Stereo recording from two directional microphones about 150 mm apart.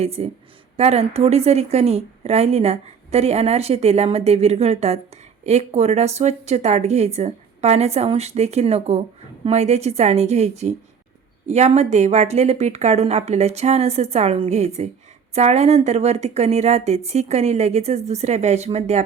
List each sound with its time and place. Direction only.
0.0 s a woman's voice: 45° right (ahead or behind)